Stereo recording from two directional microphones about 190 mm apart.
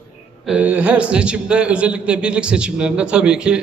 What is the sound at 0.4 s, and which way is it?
A man's voice, 5° right (ahead or behind).